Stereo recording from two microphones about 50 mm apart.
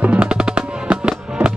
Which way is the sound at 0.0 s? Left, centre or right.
Right.